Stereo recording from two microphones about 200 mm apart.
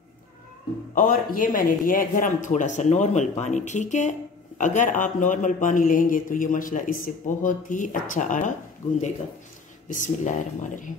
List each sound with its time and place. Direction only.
0.9 s speech: 45° left (ahead or behind)
9.8 s speech: 40° left (ahead or behind)